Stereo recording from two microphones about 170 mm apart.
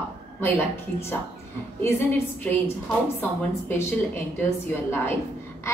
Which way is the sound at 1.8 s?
15° left (ahead or behind).